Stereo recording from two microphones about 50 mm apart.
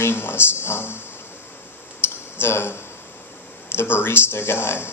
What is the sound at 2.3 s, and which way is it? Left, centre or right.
A man's voice, left.